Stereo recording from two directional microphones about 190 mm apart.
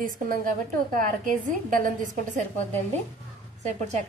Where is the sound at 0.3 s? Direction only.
45° right (ahead or behind).